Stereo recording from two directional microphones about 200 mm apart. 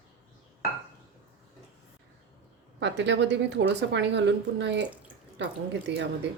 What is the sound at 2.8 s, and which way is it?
A woman's voice, 60° right (ahead or behind).